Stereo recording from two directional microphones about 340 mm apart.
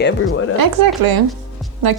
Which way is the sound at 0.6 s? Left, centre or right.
Right.